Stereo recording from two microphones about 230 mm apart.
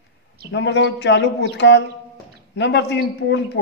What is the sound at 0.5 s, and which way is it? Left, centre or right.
Speech, left.